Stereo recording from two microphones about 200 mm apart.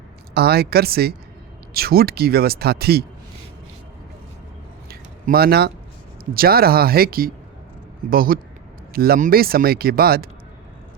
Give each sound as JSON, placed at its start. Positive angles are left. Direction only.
{"t": 0.3, "sound": "speech", "side_deg": -50}
{"t": 4.9, "sound": "a sound", "side_deg": -50}
{"t": 6.3, "sound": "speech", "side_deg": -50}